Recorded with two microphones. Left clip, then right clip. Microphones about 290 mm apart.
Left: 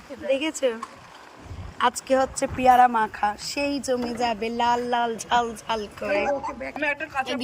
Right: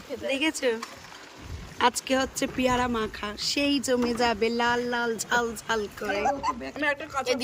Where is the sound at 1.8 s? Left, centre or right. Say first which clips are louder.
Left 3 dB; centre.